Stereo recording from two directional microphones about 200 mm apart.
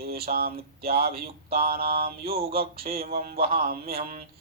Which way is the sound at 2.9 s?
30° right (ahead or behind).